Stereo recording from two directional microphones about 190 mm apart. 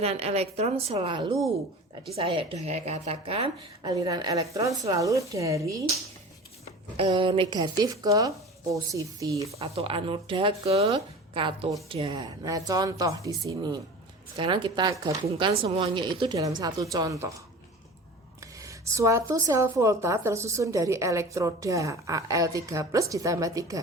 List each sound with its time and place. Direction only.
0.0 s speech: 30° right (ahead or behind); by 5.7 s 15° right (ahead or behind)
6.9 s speech: 30° right (ahead or behind)
9.6 s speech: 30° right (ahead or behind); by 17.4 s 15° right (ahead or behind)
18.6 s speech: 15° right (ahead or behind)